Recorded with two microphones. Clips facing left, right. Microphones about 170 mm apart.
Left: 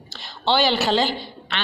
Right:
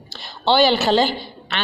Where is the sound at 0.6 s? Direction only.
50° right (ahead or behind).